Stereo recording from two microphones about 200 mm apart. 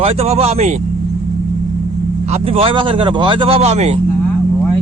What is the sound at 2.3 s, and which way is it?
A man's voice, 30° right (ahead or behind).